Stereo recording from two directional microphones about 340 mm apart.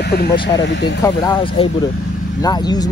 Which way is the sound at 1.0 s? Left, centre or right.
Centre.